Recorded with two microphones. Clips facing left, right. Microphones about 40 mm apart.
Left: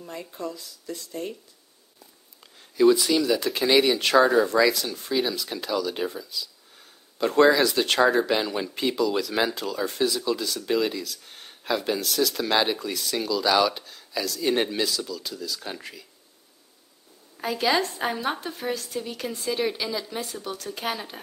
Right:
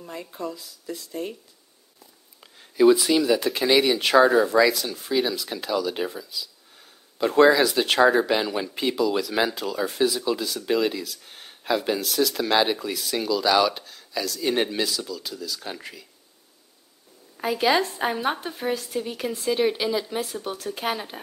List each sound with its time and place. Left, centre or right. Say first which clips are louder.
0.0 s speech: right 1 dB; centre
2.4 s speech: right 2 dB; centre
17.4 s a woman's voice: right 2 dB; centre
19.7 s a woman's voice: right 5 dB; centre
20.2 s a woman's voice: right 3 dB; centre